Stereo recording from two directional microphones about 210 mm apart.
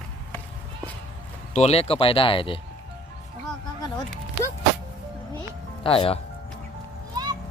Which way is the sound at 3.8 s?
20° left (ahead or behind).